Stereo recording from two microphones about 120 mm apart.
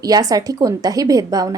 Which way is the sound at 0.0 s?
30° right (ahead or behind).